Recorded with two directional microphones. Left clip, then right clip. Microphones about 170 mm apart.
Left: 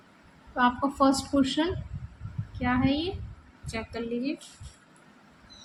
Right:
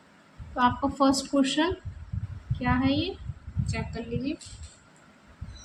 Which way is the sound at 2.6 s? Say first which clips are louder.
Even; 5° left (ahead or behind).